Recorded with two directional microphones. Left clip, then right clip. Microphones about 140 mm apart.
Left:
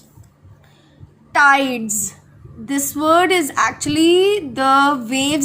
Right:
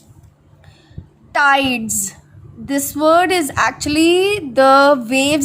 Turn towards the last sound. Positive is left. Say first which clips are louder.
# right 5 dB
turn(degrees=-40)  # may be behind; listen again after turning